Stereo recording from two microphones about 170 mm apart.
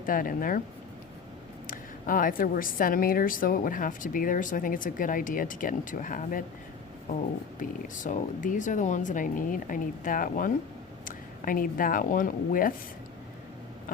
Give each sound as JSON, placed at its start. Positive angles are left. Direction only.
{"t": 0.0, "sound": "speech", "side_deg": 55}
{"t": 1.6, "sound": "a woman's voice", "side_deg": 55}
{"t": 7.6, "sound": "a woman's voice", "side_deg": 50}